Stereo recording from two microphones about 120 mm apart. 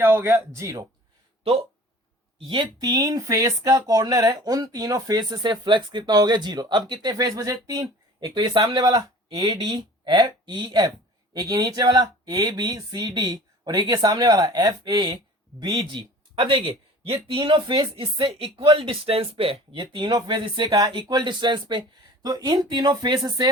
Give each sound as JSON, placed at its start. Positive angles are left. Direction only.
{"t": 0.0, "sound": "speech", "side_deg": -20}
{"t": 2.8, "sound": "speech", "side_deg": -30}
{"t": 8.3, "sound": "speech", "side_deg": -40}